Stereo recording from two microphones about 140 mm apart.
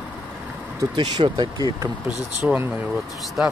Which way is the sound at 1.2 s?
45° right (ahead or behind).